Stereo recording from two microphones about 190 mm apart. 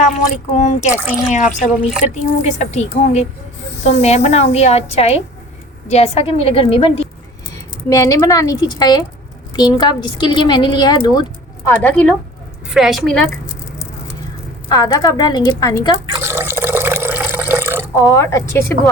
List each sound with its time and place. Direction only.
0.5 s a woman's voice: 35° left (ahead or behind)
0.9 s a woman's voice: 10° right (ahead or behind)
1.3 s a woman's voice: 40° left (ahead or behind)
7.9 s a woman's voice: 15° left (ahead or behind)
14.7 s a woman's voice: 20° left (ahead or behind)
16.1 s water: 10° right (ahead or behind)
18.0 s a woman's voice: 15° left (ahead or behind)